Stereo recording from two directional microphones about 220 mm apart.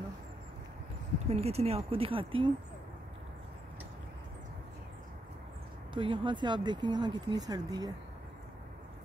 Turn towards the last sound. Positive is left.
turn(degrees=-15)  # may be behind; listen again after turning